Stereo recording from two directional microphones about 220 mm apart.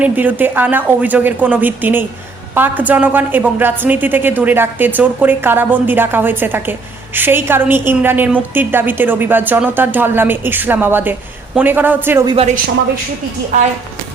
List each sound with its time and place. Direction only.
0.0 s a woman's voice: 10° right (ahead or behind)
12.3 s a woman's voice: 25° right (ahead or behind)